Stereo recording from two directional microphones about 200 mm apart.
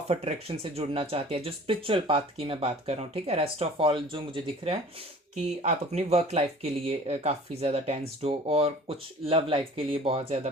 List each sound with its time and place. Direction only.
0.1 s speech: 30° right (ahead or behind)